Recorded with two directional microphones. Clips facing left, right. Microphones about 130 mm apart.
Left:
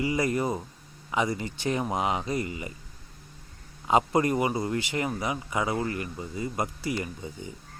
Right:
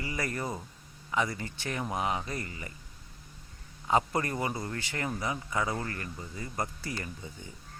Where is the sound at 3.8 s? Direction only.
20° left (ahead or behind).